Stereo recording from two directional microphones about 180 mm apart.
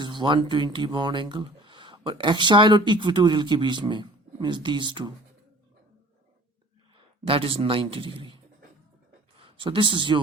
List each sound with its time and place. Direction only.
0.0 s speech: 25° right (ahead or behind)
7.3 s speech: 30° right (ahead or behind)
9.4 s speech: 25° right (ahead or behind)